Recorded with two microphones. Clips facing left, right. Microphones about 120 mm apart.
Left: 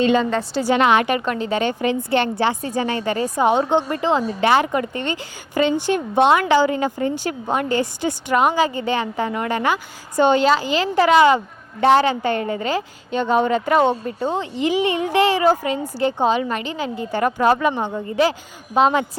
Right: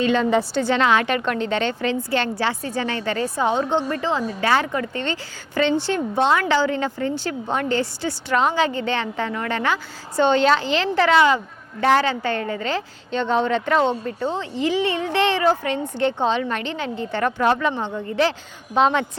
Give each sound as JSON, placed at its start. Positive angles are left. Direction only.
{"t": 0.5, "sound": "a woman's voice", "side_deg": 10}
{"t": 12.6, "sound": "speech", "side_deg": 10}